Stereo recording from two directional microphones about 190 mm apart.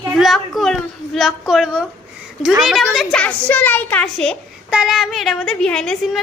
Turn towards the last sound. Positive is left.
turn(degrees=0)  # may be behind; listen again after turning